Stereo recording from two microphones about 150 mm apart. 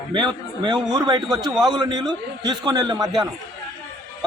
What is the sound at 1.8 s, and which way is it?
A man's voice, 30° right (ahead or behind).